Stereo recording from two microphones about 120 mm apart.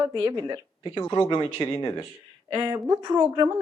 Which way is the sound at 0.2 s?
30° right (ahead or behind).